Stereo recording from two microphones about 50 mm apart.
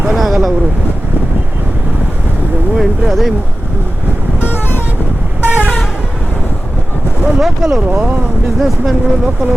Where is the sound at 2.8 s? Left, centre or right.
Centre.